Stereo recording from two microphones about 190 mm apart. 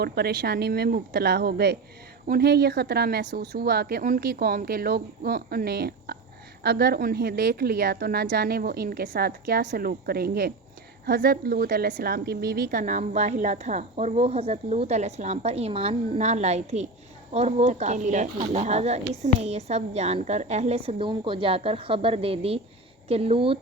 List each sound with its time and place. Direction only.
0.0 s a woman's voice: 55° right (ahead or behind); by 23.6 s 30° right (ahead or behind)